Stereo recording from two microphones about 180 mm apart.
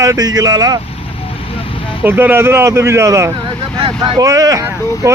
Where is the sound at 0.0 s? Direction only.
20° right (ahead or behind).